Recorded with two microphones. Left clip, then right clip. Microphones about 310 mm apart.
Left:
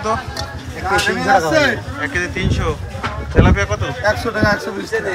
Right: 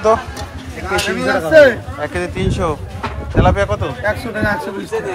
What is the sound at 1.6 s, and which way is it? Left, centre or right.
Speech, centre.